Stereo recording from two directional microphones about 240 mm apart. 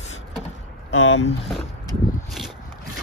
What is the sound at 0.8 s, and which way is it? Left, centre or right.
Speech, left.